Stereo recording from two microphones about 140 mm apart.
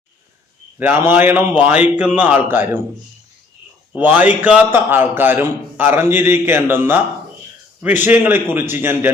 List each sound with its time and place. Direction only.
0.8 s a man's voice: 15° right (ahead or behind)
3.9 s a man's voice: 15° right (ahead or behind)